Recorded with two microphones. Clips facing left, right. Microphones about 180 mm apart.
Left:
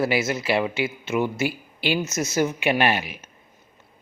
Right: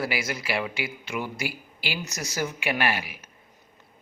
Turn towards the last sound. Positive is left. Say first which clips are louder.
# left 5 dB
turn(degrees=25)  # may be behind; listen again after turning